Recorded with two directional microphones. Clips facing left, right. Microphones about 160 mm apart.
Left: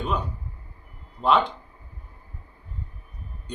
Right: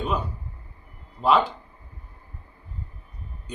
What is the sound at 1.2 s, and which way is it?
Speech, 5° right (ahead or behind).